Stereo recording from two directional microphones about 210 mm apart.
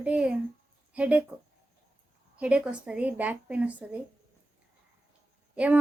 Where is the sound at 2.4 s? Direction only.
5° right (ahead or behind).